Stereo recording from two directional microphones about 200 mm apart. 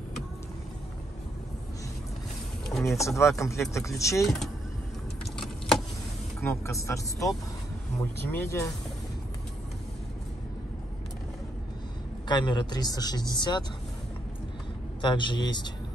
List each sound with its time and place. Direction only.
2.7 s a sound: centre (ahead or behind)
3.0 s speech: 15° left (ahead or behind)
6.4 s speech: 15° left (ahead or behind)
12.3 s speech: 20° left (ahead or behind)
15.0 s speech: 25° left (ahead or behind)